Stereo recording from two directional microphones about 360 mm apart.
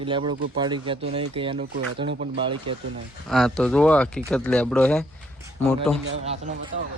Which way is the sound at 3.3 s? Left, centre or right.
Centre.